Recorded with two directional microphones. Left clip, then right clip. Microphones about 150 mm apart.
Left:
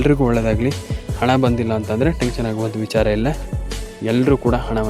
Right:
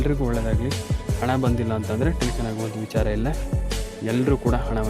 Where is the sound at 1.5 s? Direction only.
20° left (ahead or behind).